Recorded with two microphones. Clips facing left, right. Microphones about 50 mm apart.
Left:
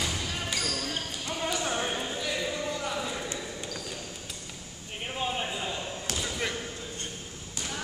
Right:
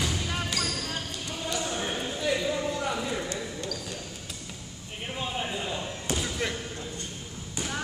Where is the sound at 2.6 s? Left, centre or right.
Centre.